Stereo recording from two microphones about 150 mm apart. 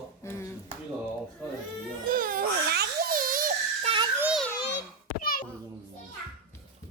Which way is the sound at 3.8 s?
35° right (ahead or behind).